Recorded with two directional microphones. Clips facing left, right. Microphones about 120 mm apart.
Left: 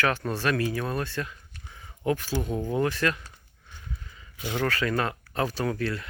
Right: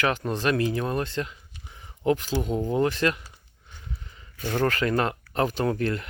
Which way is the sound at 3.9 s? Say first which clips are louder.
Right 1 dB; 25° right (ahead or behind).